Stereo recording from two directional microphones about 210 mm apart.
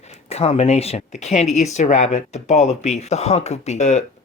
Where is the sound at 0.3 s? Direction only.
30° left (ahead or behind).